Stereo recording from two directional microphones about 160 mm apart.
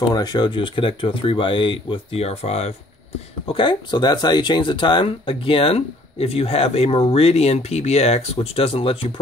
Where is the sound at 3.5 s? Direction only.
30° left (ahead or behind).